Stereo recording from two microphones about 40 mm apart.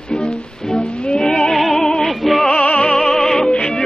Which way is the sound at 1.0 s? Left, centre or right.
Centre.